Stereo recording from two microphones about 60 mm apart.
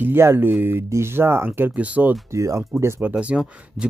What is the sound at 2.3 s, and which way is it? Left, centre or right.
Speech, right.